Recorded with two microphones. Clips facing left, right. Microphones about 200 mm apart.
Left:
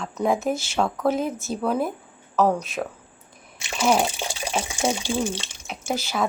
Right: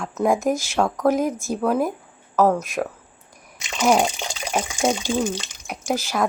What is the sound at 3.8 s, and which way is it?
Speech, 15° right (ahead or behind).